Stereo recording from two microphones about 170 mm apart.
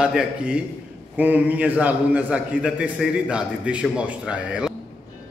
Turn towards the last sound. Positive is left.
turn(degrees=-5)  # may be behind; listen again after turning